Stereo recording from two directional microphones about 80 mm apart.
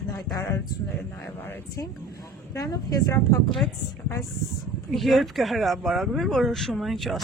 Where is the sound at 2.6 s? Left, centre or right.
Left.